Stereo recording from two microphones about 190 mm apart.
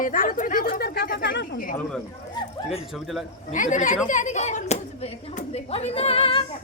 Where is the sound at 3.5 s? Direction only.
40° left (ahead or behind).